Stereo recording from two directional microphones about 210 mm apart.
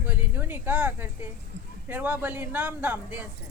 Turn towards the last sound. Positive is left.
turn(degrees=-10)  # may be behind; listen again after turning